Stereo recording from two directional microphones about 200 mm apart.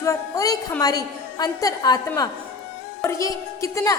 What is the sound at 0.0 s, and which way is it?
A woman's voice, 15° left (ahead or behind).